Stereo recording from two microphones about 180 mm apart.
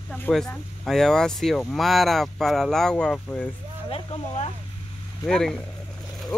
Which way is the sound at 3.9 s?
35° left (ahead or behind).